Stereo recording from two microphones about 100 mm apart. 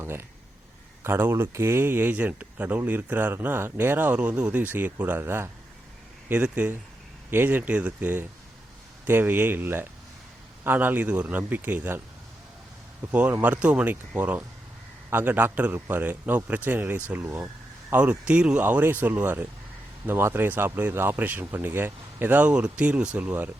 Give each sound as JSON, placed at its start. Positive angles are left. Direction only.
{"t": 0.0, "sound": "speech", "side_deg": -25}
{"t": 13.1, "sound": "speech", "side_deg": -15}
{"t": 17.9, "sound": "speech", "side_deg": -15}